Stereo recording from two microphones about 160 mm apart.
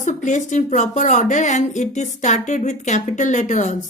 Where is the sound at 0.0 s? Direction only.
50° left (ahead or behind).